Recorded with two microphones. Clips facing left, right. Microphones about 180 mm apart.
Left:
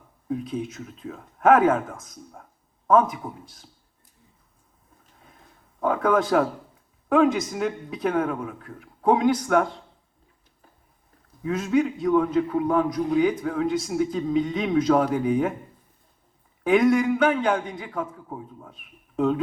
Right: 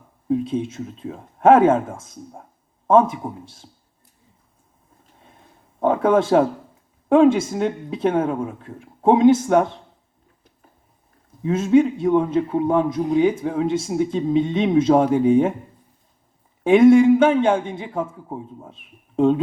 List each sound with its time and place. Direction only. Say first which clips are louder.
0.3 s a man's voice: right 7 dB; 25° right (ahead or behind)
5.2 s a sound: right 3 dB; 30° right (ahead or behind)
7.1 s a man's voice: right 6 dB; 30° right (ahead or behind)
11.4 s a man's voice: right 6 dB; 25° right (ahead or behind)
16.6 s a man's voice: right 8 dB; 25° right (ahead or behind)